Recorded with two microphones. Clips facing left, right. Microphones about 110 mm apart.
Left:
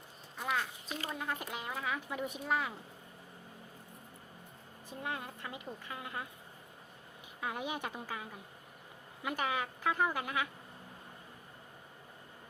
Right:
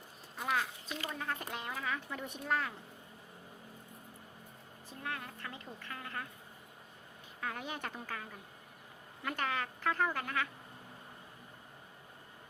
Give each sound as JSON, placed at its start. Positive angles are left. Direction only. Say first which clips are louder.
{"t": 0.3, "sound": "a sound", "louder": "right 1 dB", "side_deg": 0}
{"t": 0.9, "sound": "speech", "louder": "left 1 dB", "side_deg": 35}
{"t": 1.1, "sound": "speech", "louder": "left 1 dB", "side_deg": 5}
{"t": 4.9, "sound": "speech", "louder": "left 2 dB", "side_deg": 20}
{"t": 7.4, "sound": "speech", "louder": "left 2 dB", "side_deg": 15}